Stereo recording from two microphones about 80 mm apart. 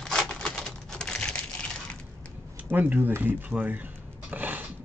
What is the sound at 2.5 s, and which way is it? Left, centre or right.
Speech, right.